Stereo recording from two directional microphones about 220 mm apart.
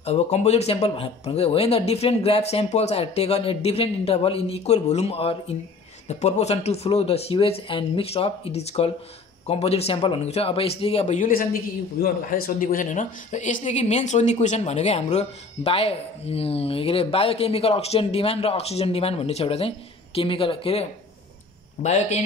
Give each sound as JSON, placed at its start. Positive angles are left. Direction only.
{"t": 0.0, "sound": "speech", "side_deg": 30}
{"t": 21.8, "sound": "a man's voice", "side_deg": 30}